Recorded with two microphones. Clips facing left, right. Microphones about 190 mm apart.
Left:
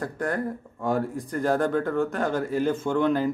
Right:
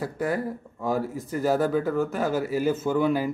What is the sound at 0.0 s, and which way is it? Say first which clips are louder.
Speech: right 1 dB; 5° right (ahead or behind).